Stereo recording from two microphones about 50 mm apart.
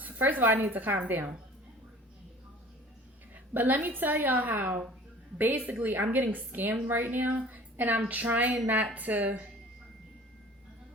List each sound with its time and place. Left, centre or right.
0.0 s a woman's voice: right
3.5 s a woman's voice: right